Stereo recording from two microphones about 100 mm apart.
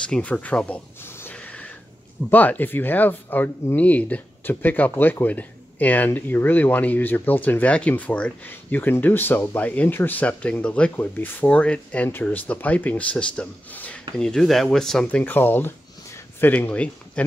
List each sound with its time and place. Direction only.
0.0 s speech: 10° left (ahead or behind)
1.3 s a sound: 15° left (ahead or behind)
2.3 s speech: 15° left (ahead or behind)
15.0 s speech: 15° left (ahead or behind)